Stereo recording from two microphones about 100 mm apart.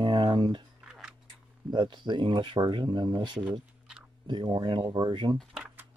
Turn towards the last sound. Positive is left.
turn(degrees=-50)  # may be behind; listen again after turning